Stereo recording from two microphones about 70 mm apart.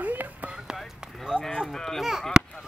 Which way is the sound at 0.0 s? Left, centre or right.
Right.